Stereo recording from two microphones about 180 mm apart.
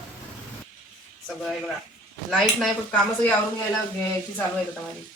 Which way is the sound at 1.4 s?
Centre (ahead or behind).